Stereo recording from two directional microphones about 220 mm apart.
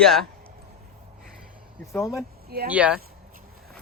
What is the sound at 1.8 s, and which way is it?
Speech, 15° left (ahead or behind).